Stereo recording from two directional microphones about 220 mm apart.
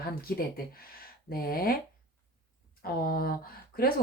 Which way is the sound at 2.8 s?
45° left (ahead or behind).